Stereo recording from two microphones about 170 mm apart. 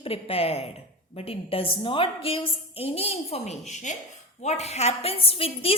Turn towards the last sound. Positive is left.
turn(degrees=35)  # may be behind; listen again after turning